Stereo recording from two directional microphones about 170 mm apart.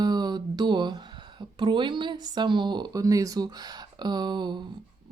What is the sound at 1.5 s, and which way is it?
Speech, 25° right (ahead or behind).